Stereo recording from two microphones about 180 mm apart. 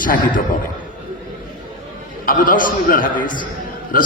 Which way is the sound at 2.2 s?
50° left (ahead or behind).